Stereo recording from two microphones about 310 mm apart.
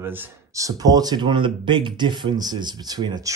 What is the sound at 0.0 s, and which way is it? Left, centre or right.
Speech, centre.